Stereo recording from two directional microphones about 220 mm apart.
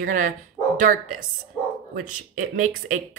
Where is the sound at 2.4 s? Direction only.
35° right (ahead or behind).